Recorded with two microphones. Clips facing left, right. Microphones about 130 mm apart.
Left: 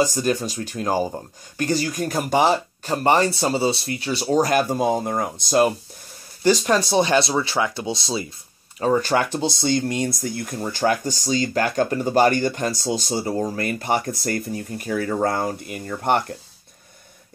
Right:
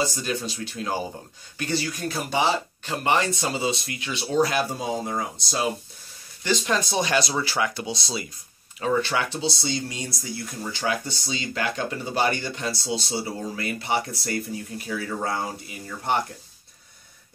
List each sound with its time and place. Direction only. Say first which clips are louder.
0.0 s speech: left 6 dB; 45° left (ahead or behind)
6.4 s speech: left 6 dB; 40° left (ahead or behind); by 8.3 s 25° left (ahead or behind)
8.7 s speech: left 5 dB; 40° left (ahead or behind); by 16.3 s 55° left (ahead or behind)